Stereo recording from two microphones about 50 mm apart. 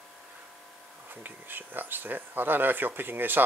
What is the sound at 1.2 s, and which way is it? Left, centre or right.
Speech, right.